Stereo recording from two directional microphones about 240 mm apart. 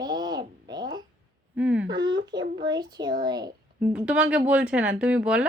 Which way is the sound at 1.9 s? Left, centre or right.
Centre.